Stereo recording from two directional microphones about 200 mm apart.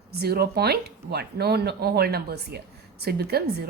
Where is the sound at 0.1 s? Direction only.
50° right (ahead or behind).